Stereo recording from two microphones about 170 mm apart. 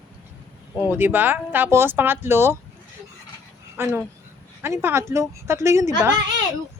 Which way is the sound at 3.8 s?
10° right (ahead or behind).